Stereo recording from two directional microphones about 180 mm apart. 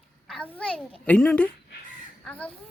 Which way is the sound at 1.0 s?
5° left (ahead or behind).